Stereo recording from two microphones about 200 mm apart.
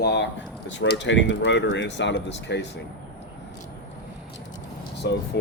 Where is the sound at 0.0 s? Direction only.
55° left (ahead or behind).